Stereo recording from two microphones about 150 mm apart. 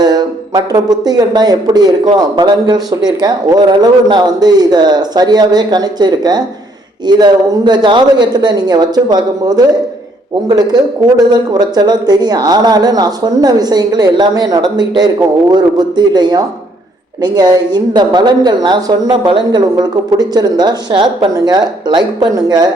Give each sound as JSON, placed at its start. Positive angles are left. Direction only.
{"t": 0.0, "sound": "speech", "side_deg": -25}